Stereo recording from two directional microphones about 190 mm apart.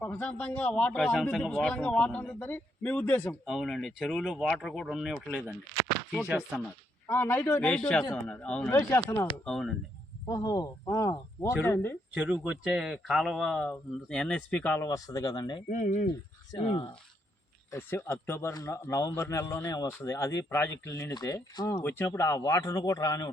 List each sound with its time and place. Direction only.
0.0 s speech: 10° left (ahead or behind)
7.1 s speech: 10° left (ahead or behind)
9.4 s speech: centre (ahead or behind)
10.2 s speech: 20° left (ahead or behind)
12.1 s speech: 5° right (ahead or behind); by 15.6 s 20° left (ahead or behind)
15.7 s speech: 40° left (ahead or behind)
16.5 s speech: 25° left (ahead or behind)
17.7 s speech: 15° left (ahead or behind)